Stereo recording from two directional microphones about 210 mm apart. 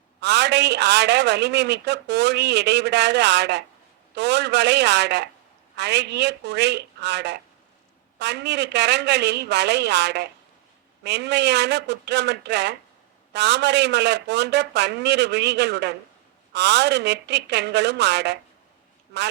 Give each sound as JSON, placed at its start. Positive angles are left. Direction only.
{"t": 0.2, "sound": "a man's voice", "side_deg": -55}